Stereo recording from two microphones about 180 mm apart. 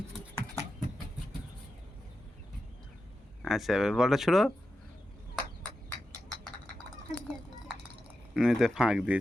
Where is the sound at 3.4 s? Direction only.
Centre (ahead or behind).